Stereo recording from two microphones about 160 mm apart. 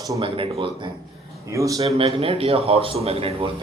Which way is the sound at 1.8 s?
35° right (ahead or behind).